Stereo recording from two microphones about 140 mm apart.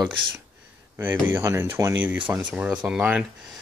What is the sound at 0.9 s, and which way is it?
Speech, 15° right (ahead or behind).